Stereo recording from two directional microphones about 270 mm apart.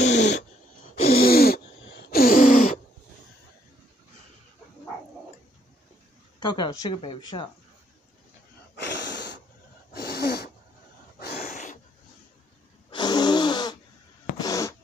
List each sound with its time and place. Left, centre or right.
0.0 s dog: left
1.1 s a sound: left
6.4 s speech: centre
8.7 s gasp: left
9.9 s sneeze: left
11.1 s gasp: left
12.9 s a sound: centre